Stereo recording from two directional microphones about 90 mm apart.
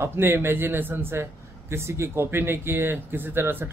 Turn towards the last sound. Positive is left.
turn(degrees=-25)  # may be behind; listen again after turning